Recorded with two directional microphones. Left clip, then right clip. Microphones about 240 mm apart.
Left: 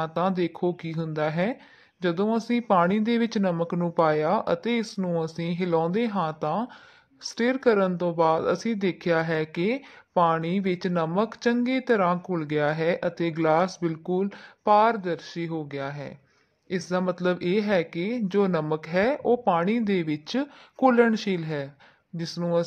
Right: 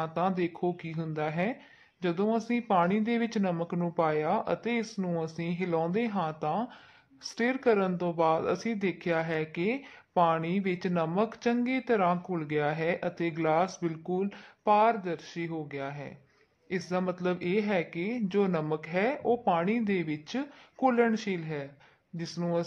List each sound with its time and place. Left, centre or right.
0.0 s speech: left